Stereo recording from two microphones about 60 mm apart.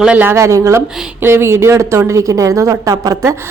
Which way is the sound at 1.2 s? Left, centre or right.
Right.